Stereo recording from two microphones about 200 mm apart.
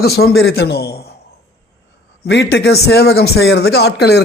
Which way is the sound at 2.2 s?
60° left (ahead or behind).